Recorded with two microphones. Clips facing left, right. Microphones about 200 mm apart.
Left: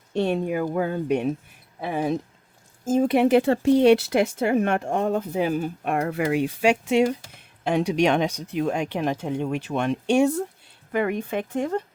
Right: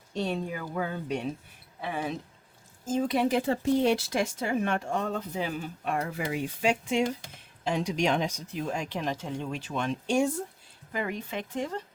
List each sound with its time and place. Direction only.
0.1 s speech: 60° left (ahead or behind)
1.8 s speech: 40° left (ahead or behind)
2.8 s speech: 55° left (ahead or behind)